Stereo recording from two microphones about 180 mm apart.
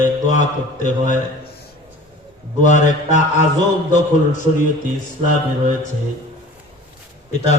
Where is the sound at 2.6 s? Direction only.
40° left (ahead or behind).